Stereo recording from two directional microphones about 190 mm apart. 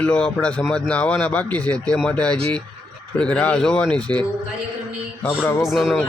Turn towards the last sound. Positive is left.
turn(degrees=5)  # may be behind; listen again after turning